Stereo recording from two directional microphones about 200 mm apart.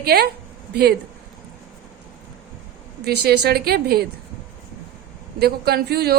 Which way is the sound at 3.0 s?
55° right (ahead or behind).